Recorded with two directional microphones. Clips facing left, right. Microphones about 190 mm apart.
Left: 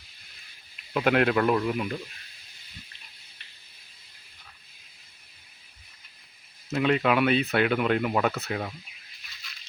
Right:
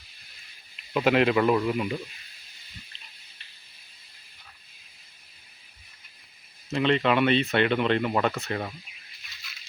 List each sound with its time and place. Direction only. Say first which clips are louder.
0.9 s speech: right 1 dB; centre (ahead or behind)
6.7 s speech: even; 5° left (ahead or behind)